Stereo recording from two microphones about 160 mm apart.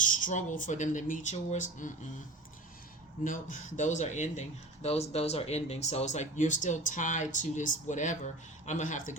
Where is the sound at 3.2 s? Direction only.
55° left (ahead or behind).